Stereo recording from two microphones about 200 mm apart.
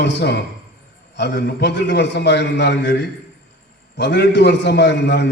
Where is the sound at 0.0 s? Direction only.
60° left (ahead or behind).